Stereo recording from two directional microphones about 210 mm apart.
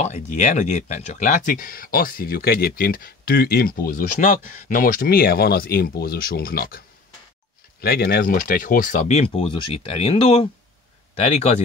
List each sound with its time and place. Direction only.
0.0 s speech: 35° left (ahead or behind)
7.8 s speech: 50° left (ahead or behind); by 11.6 s 35° left (ahead or behind)